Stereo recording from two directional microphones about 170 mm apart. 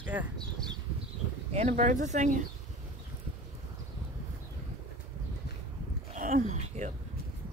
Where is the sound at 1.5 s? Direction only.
40° right (ahead or behind).